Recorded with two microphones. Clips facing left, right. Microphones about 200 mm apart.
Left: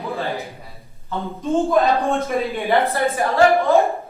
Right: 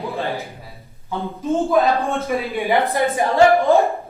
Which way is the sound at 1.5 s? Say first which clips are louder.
Even; centre (ahead or behind).